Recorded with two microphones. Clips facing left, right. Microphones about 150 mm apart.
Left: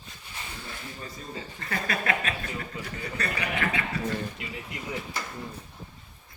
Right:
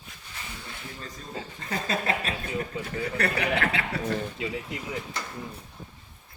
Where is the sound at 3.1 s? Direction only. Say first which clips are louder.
Right 4 dB; 65° right (ahead or behind).